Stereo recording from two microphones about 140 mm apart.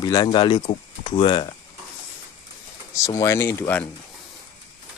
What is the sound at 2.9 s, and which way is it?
Speech, 25° left (ahead or behind).